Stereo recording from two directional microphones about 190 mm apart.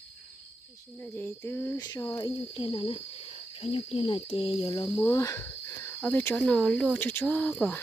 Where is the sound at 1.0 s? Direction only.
10° left (ahead or behind).